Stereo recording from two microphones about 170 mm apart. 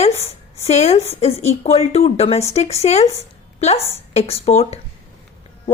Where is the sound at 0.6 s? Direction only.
40° left (ahead or behind).